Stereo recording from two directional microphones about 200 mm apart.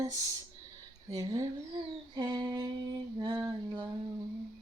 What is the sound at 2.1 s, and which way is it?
Humming, 20° right (ahead or behind).